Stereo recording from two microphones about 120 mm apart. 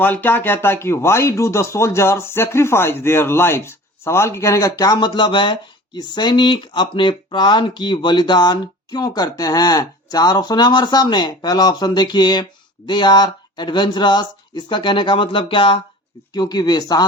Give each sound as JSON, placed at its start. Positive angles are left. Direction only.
{"t": 0.0, "sound": "speech", "side_deg": 15}
{"t": 16.3, "sound": "speech", "side_deg": 35}